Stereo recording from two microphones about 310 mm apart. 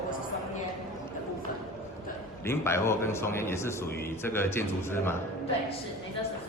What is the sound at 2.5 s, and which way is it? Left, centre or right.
Speech, centre.